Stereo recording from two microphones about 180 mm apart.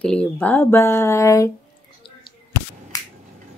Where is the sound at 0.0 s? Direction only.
5° left (ahead or behind).